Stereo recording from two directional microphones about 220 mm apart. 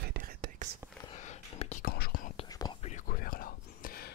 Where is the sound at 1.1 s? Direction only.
30° left (ahead or behind).